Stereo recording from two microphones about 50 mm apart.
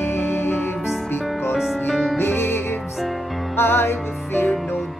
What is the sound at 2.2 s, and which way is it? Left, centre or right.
Music, left.